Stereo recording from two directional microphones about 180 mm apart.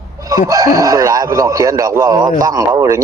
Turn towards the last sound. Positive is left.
turn(degrees=-20)  # may be behind; listen again after turning